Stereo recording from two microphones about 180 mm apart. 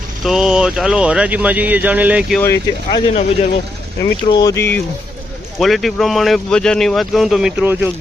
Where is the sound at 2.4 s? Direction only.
15° left (ahead or behind).